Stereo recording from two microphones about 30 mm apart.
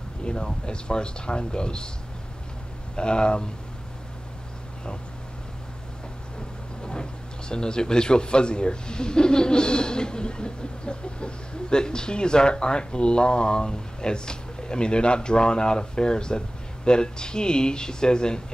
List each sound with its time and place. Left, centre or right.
0.2 s speech: left
3.0 s speech: left
6.8 s speech: left